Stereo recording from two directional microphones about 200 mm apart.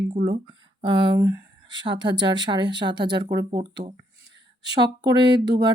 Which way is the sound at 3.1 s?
55° right (ahead or behind).